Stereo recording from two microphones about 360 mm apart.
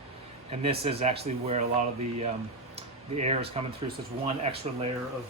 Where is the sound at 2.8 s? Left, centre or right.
Centre.